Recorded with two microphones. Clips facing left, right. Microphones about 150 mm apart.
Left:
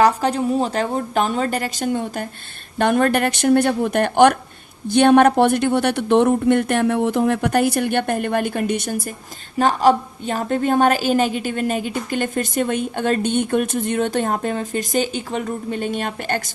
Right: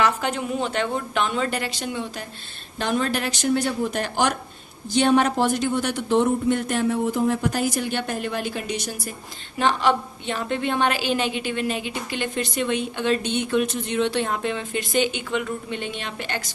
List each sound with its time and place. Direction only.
0.0 s a woman's voice: 35° left (ahead or behind); by 9.0 s 50° left (ahead or behind)
9.6 s a woman's voice: 40° left (ahead or behind)